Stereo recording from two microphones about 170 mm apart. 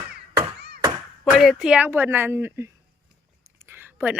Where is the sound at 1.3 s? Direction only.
Centre (ahead or behind).